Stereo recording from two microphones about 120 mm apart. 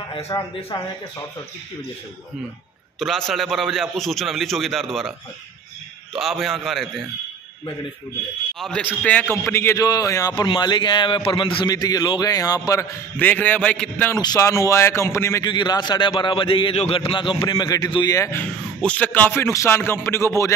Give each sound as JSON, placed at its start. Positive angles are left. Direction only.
{"t": 0.3, "sound": "a man's voice", "side_deg": 35}
{"t": 3.0, "sound": "a man's voice", "side_deg": 0}
{"t": 6.1, "sound": "a man's voice", "side_deg": 0}
{"t": 8.5, "sound": "a man's voice", "side_deg": 5}
{"t": 9.8, "sound": "a man's voice", "side_deg": 30}
{"t": 10.3, "sound": "a man's voice", "side_deg": 40}
{"t": 13.2, "sound": "a man's voice", "side_deg": 15}
{"t": 14.1, "sound": "a man's voice", "side_deg": 30}
{"t": 15.4, "sound": "a man's voice", "side_deg": 40}
{"t": 18.4, "sound": "a man's voice", "side_deg": 10}